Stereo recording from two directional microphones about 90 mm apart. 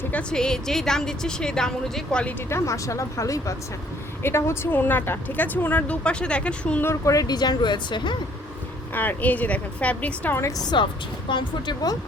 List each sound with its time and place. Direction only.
0.1 s a woman's voice: 10° left (ahead or behind)
2.5 s speech: 35° left (ahead or behind); by 6.8 s 15° left (ahead or behind)
6.8 s speech: 35° left (ahead or behind); by 8.1 s 60° left (ahead or behind)
9.0 s a woman's voice: 20° left (ahead or behind)
10.6 s speech: 50° left (ahead or behind)